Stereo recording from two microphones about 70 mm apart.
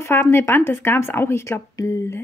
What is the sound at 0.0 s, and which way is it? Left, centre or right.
Speech, left.